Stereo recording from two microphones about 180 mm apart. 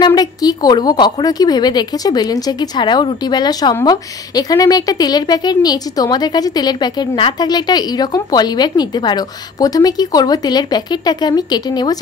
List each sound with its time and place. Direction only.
0.0 s a woman's voice: 20° left (ahead or behind)